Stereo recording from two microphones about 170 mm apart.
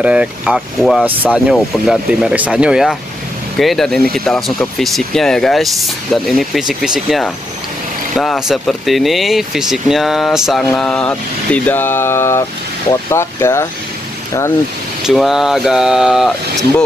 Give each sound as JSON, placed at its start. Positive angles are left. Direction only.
{"t": 0.0, "sound": "speech", "side_deg": -5}
{"t": 15.0, "sound": "speech", "side_deg": 0}